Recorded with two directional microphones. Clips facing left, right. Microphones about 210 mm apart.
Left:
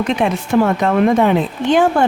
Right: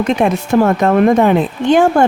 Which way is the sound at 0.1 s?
45° right (ahead or behind).